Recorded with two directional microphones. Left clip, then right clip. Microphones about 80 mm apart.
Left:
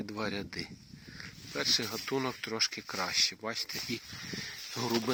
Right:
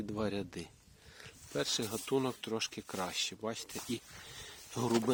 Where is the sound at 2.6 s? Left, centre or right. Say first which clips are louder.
Left 7 dB; centre.